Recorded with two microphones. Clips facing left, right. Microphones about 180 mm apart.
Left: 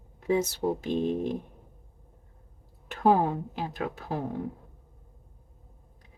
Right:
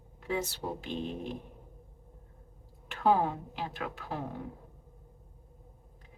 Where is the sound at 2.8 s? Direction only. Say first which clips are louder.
Left 4 dB; 40° left (ahead or behind).